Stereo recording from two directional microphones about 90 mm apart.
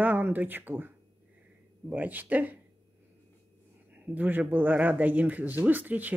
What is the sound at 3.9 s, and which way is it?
Speech, 20° right (ahead or behind).